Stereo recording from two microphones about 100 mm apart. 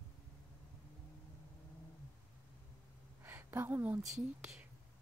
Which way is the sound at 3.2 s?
20° right (ahead or behind).